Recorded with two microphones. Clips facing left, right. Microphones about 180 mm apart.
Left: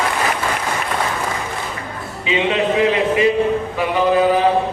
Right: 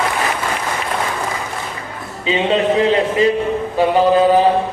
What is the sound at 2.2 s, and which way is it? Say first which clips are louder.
A man's voice: right 2 dB; 30° right (ahead or behind).